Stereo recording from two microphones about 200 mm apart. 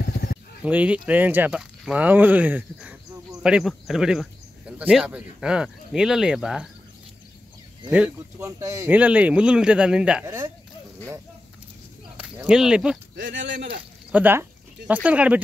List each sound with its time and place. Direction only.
0.0 s a sound: 45° left (ahead or behind)
0.7 s speech: 5° right (ahead or behind)
7.9 s speech: 10° right (ahead or behind)
12.2 s speech: 5° right (ahead or behind)
13.1 s speech: 65° right (ahead or behind)
14.1 s speech: 10° right (ahead or behind)